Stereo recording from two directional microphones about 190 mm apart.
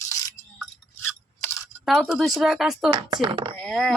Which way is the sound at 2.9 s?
25° right (ahead or behind).